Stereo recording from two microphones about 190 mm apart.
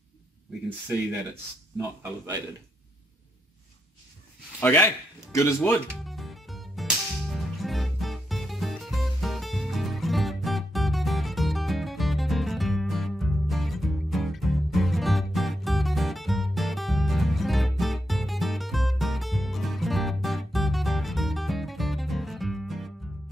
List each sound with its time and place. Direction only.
1.8 s speech: 20° right (ahead or behind)
4.6 s speech: 10° left (ahead or behind)
6.0 s music: centre (ahead or behind)